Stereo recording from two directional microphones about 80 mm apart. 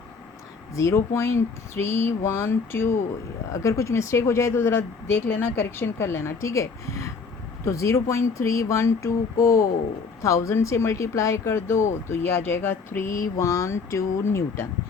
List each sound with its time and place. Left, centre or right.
0.8 s speech: left